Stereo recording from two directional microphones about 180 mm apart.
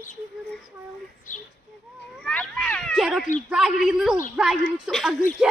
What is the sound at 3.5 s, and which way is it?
Speech, 5° right (ahead or behind).